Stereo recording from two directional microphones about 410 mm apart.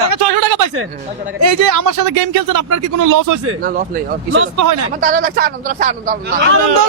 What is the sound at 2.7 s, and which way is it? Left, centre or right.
Speech, right.